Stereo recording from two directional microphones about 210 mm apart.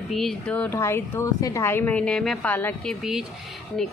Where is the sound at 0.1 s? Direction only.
Centre (ahead or behind).